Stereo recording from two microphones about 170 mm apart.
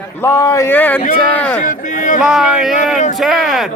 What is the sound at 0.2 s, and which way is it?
Speech, 15° left (ahead or behind).